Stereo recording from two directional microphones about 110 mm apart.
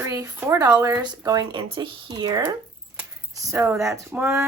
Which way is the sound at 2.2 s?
35° right (ahead or behind).